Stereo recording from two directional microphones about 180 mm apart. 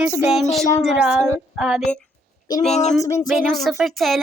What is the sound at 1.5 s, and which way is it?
Speech, 5° right (ahead or behind).